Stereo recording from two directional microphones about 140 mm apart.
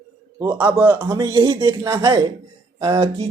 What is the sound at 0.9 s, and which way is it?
Speech, 15° right (ahead or behind).